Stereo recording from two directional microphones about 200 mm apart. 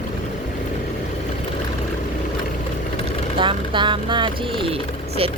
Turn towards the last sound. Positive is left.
turn(degrees=-30)  # may be behind; listen again after turning